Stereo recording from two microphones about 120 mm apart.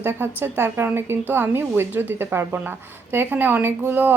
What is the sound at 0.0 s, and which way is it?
A woman's voice, 20° right (ahead or behind).